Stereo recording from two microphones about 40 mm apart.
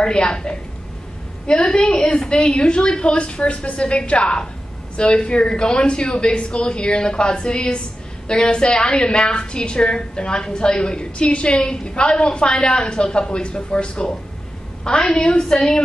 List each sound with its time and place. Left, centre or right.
0.0 s a woman's voice: left